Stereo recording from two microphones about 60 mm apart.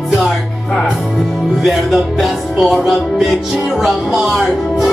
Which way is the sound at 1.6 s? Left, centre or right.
Centre.